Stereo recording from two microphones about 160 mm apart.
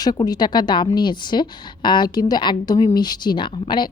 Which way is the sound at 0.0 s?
25° left (ahead or behind).